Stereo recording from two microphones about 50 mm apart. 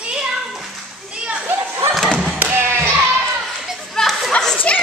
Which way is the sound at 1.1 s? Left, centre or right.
Right.